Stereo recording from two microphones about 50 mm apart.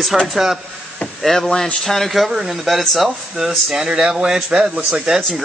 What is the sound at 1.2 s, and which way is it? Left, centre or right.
Speech, centre.